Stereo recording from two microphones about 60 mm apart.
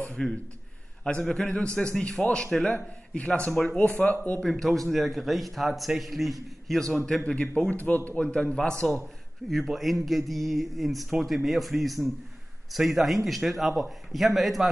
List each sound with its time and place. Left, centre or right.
0.1 s a sound: centre
1.2 s a man's voice: centre; by 4.4 s left
4.4 s a man's voice: centre
7.2 s a man's voice: centre
9.5 s a man's voice: centre